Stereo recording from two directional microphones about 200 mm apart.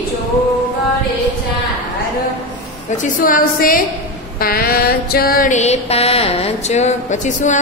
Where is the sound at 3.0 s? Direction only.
45° left (ahead or behind).